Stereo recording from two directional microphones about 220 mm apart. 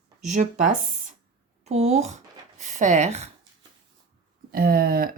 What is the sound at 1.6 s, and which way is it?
Speech, 30° right (ahead or behind).